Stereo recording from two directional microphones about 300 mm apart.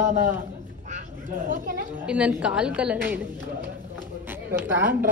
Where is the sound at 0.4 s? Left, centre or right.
Right.